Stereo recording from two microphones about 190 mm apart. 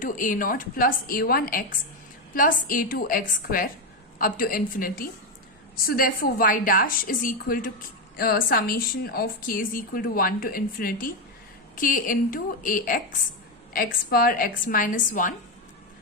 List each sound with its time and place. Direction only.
0.0 s a woman's voice: 45° left (ahead or behind)